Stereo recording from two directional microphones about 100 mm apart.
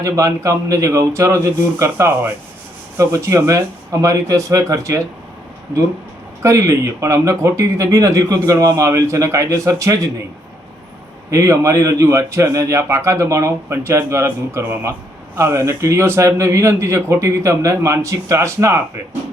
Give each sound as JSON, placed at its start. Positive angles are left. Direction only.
{"t": 0.0, "sound": "a man's voice", "side_deg": -35}
{"t": 6.4, "sound": "a man's voice", "side_deg": -30}
{"t": 11.3, "sound": "a man's voice", "side_deg": -30}